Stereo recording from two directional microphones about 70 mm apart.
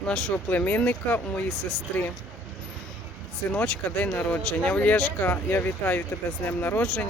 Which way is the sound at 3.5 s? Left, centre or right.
Left.